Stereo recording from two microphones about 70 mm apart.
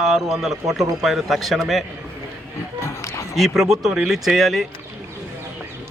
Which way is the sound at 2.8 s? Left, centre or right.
Left.